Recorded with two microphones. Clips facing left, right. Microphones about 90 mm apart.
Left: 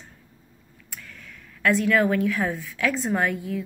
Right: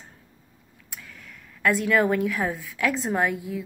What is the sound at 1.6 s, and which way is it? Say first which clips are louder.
A woman's voice: left 1 dB; 15° right (ahead or behind).